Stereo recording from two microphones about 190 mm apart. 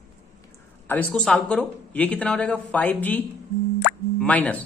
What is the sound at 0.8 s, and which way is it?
A woman's voice, 5° left (ahead or behind).